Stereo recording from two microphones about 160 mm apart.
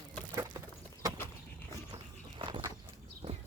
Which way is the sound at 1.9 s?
30° right (ahead or behind).